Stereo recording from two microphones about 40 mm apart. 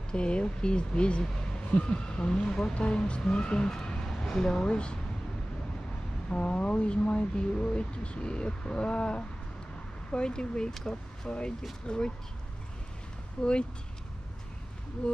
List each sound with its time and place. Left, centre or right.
0.1 s speech: left
6.3 s speech: left
13.4 s speech: left